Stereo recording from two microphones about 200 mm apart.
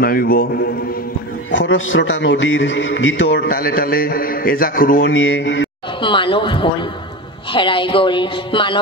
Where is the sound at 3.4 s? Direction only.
45° left (ahead or behind).